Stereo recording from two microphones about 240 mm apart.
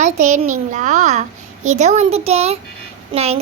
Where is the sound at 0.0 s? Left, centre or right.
Right.